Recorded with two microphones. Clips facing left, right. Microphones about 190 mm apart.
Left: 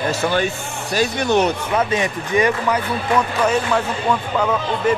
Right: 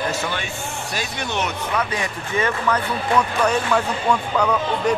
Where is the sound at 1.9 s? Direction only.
20° left (ahead or behind).